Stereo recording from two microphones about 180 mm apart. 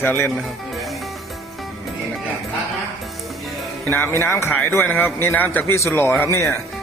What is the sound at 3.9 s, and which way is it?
Speech, 10° left (ahead or behind).